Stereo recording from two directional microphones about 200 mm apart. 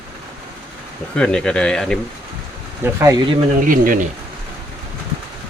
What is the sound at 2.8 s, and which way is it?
Speech, 15° right (ahead or behind).